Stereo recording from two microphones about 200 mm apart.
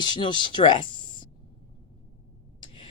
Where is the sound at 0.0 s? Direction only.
20° left (ahead or behind).